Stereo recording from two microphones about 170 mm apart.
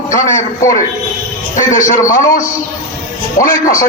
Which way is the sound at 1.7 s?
50° left (ahead or behind).